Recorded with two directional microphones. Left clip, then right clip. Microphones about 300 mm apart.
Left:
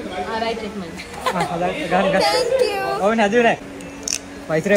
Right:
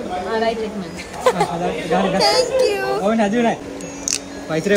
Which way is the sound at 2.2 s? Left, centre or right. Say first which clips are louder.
Right 2 dB; centre.